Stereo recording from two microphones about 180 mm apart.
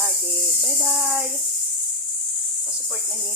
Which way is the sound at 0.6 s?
5° right (ahead or behind).